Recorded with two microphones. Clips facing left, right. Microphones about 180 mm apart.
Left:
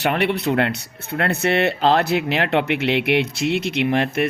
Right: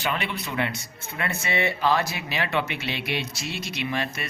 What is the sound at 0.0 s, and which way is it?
Speech, 65° left (ahead or behind).